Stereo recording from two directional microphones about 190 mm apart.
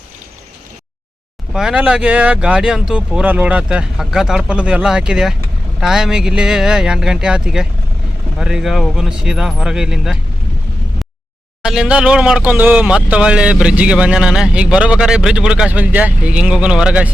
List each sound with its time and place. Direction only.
1.5 s speech: 5° right (ahead or behind)
11.6 s speech: 5° right (ahead or behind)